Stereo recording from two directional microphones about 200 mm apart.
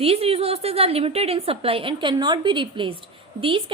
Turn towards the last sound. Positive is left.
turn(degrees=-25)  # may be behind; listen again after turning